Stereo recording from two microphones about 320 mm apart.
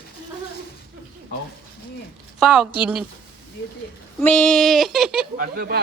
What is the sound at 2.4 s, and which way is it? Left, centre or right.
Child singing, centre.